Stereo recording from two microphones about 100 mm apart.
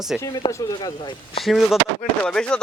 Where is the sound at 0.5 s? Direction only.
40° left (ahead or behind).